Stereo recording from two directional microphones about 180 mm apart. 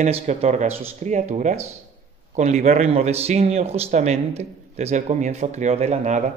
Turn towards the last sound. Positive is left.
turn(degrees=-40)  # may be behind; listen again after turning